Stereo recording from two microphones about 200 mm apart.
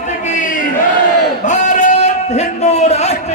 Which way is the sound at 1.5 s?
35° left (ahead or behind).